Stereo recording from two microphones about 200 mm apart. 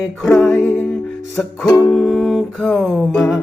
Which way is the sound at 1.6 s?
20° left (ahead or behind).